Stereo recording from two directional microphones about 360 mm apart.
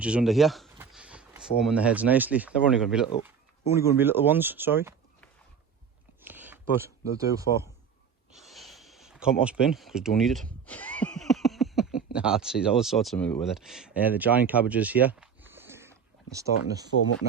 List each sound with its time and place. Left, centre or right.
0.0 s speech: centre
6.2 s a sound: centre
7.5 s a man's voice: centre
8.3 s a sound: centre
12.1 s speech: centre
16.9 s speech: left